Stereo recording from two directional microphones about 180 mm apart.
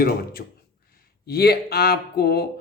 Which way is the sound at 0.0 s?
55° left (ahead or behind).